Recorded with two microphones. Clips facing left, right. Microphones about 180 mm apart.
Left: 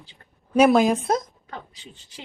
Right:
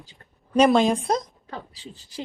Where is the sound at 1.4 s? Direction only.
35° right (ahead or behind).